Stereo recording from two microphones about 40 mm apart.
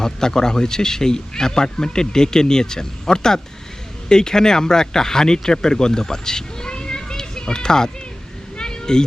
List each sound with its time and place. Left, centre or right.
0.0 s speech: centre
8.5 s cat: centre